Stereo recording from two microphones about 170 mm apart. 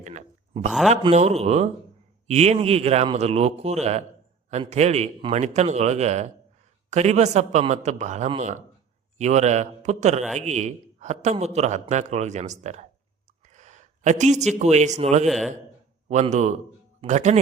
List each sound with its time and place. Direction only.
0.0 s a sound: 45° right (ahead or behind)
1.1 s a man's voice: 40° right (ahead or behind)
13.5 s a sound: 45° right (ahead or behind)
14.6 s a man's voice: 40° right (ahead or behind)
15.3 s a man's voice: centre (ahead or behind)
16.0 s a man's voice: 45° right (ahead or behind)